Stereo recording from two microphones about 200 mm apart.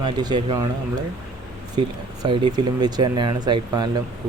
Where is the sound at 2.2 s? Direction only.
20° right (ahead or behind).